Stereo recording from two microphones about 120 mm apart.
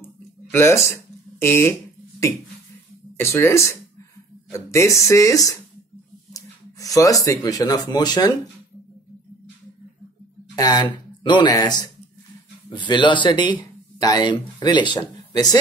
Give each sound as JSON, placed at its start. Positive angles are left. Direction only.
{"t": 0.5, "sound": "speech", "side_deg": 20}
{"t": 1.4, "sound": "a sound", "side_deg": 20}
{"t": 3.2, "sound": "speech", "side_deg": 20}
{"t": 10.5, "sound": "speech", "side_deg": 35}